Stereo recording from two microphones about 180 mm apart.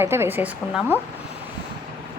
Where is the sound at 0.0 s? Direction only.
15° right (ahead or behind).